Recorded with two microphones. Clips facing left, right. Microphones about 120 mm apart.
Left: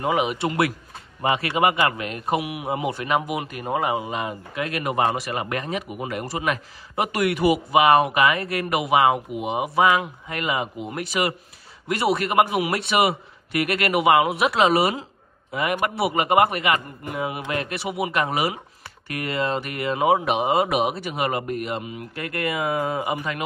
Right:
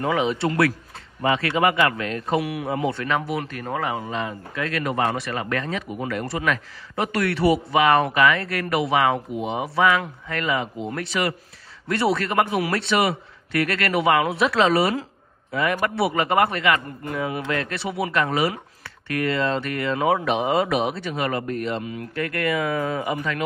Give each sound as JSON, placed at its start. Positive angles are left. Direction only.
{"t": 0.0, "sound": "a man's voice", "side_deg": 15}
{"t": 7.3, "sound": "speech", "side_deg": -30}
{"t": 7.8, "sound": "a man's voice", "side_deg": 15}